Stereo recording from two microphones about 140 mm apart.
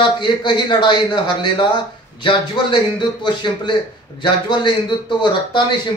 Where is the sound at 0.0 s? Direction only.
35° left (ahead or behind).